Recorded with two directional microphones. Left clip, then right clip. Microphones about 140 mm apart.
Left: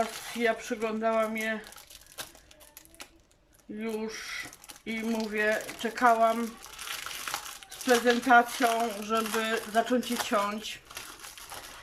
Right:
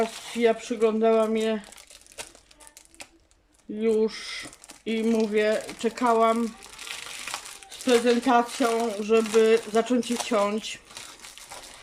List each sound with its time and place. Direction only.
0.4 s speech: 40° right (ahead or behind)
3.8 s speech: 40° right (ahead or behind)
7.3 s crumpling: 25° right (ahead or behind)
7.9 s speech: 35° right (ahead or behind)